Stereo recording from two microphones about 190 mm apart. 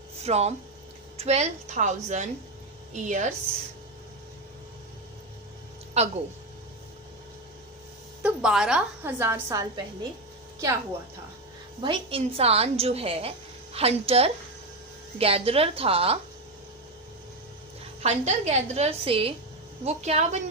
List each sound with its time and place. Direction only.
0.2 s a woman's voice: 35° right (ahead or behind)
6.0 s speech: 35° right (ahead or behind)
8.2 s a woman's voice: 5° right (ahead or behind)
11.8 s a woman's voice: 30° right (ahead or behind)
18.0 s a woman's voice: 35° right (ahead or behind)